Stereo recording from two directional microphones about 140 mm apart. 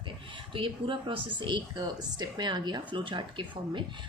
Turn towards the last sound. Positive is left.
turn(degrees=-35)  # may be behind; listen again after turning